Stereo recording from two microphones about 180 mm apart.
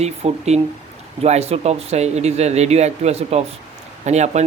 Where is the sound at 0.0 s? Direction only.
35° right (ahead or behind).